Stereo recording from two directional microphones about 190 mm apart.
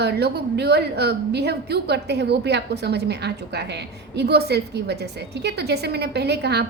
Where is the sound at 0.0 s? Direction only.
60° right (ahead or behind).